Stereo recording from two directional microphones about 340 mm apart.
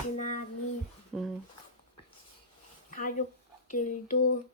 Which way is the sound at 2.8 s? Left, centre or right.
Left.